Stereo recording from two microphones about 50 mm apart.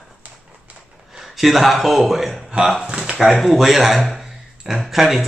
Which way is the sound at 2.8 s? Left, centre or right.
Centre.